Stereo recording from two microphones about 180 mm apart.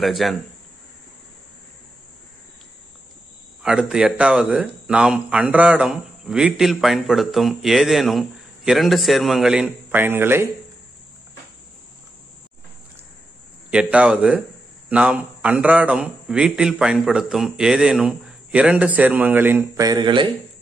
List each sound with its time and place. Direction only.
0.0 s speech: centre (ahead or behind)
3.6 s speech: 5° right (ahead or behind)
13.7 s speech: 5° right (ahead or behind)
19.9 s speech: 25° right (ahead or behind)